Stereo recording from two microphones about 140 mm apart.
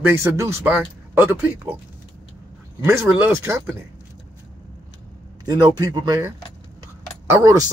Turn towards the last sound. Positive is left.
turn(degrees=-25)  # may be behind; listen again after turning